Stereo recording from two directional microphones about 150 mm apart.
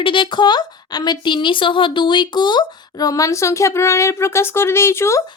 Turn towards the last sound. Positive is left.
turn(degrees=15)  # may be behind; listen again after turning